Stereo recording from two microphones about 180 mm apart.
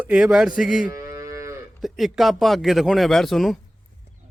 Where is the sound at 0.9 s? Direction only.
20° right (ahead or behind).